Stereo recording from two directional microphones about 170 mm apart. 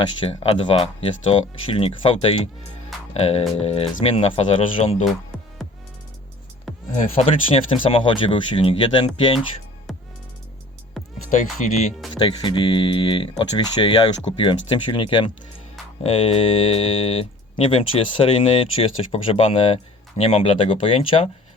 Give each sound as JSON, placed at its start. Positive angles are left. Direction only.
{"t": 0.3, "sound": "speech", "side_deg": 35}
{"t": 6.9, "sound": "speech", "side_deg": 40}
{"t": 11.0, "sound": "music", "side_deg": 0}
{"t": 11.6, "sound": "speech", "side_deg": 45}
{"t": 12.2, "sound": "speech", "side_deg": 30}